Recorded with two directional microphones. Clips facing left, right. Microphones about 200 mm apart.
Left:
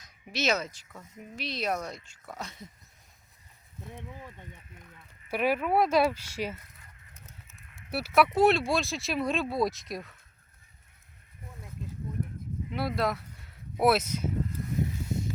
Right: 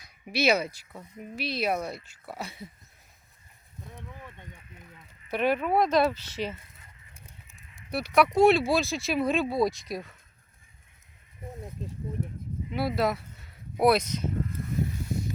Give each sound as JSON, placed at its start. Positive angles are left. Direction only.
{"t": 0.0, "sound": "speech", "side_deg": -10}
{"t": 3.9, "sound": "speech", "side_deg": 15}
{"t": 7.3, "sound": "goose", "side_deg": -15}
{"t": 7.9, "sound": "speech", "side_deg": 5}
{"t": 12.7, "sound": "speech", "side_deg": 0}